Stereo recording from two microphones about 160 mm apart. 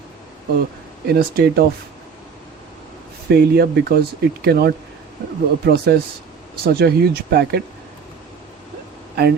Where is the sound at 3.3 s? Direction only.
75° right (ahead or behind).